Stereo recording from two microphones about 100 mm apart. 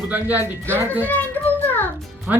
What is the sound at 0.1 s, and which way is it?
Speech, 15° right (ahead or behind).